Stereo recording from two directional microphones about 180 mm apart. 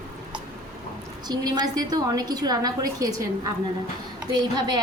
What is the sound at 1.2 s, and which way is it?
A woman's voice, 25° right (ahead or behind).